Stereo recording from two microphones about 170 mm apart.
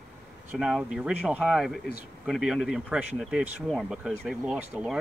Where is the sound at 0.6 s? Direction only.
5° right (ahead or behind).